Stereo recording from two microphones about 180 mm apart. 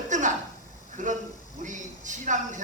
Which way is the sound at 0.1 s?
45° right (ahead or behind).